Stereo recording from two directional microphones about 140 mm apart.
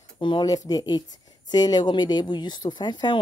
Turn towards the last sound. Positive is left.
turn(degrees=35)  # may be behind; listen again after turning